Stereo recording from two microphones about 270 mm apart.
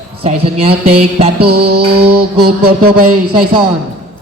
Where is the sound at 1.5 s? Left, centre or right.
Right.